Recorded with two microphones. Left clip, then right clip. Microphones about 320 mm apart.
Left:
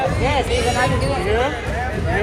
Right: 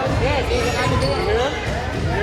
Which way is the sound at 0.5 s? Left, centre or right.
Left.